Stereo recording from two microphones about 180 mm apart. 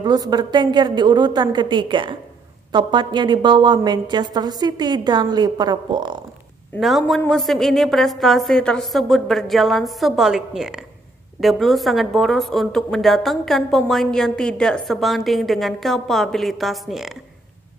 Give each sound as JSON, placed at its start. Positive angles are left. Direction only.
{"t": 0.0, "sound": "a woman's voice", "side_deg": -20}
{"t": 6.8, "sound": "speech", "side_deg": 0}